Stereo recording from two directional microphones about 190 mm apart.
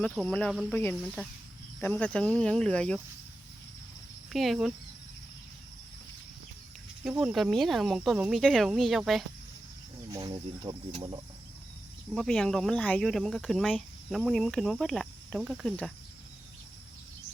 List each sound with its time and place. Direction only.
0.3 s speech: 5° left (ahead or behind)
1.8 s speech: 10° left (ahead or behind)
4.3 s speech: centre (ahead or behind)
7.2 s speech: 5° right (ahead or behind)
10.1 s speech: 15° right (ahead or behind)
12.1 s speech: centre (ahead or behind)